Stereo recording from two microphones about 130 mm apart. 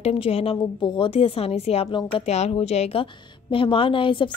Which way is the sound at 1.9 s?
40° left (ahead or behind).